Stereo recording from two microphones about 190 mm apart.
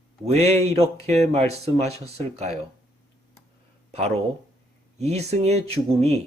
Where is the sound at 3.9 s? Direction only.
35° right (ahead or behind).